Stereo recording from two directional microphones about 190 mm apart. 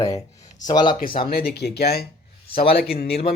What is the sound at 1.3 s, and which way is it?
Speech, 55° left (ahead or behind).